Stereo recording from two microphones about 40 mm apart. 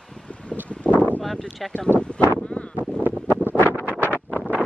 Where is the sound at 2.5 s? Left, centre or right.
Left.